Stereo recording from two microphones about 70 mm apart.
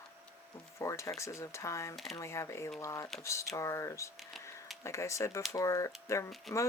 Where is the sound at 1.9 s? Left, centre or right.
Centre.